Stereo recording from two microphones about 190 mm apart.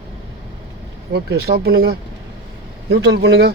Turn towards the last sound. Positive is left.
turn(degrees=-60)  # may be behind; listen again after turning